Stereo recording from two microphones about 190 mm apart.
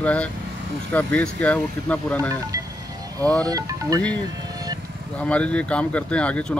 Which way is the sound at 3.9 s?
5° left (ahead or behind).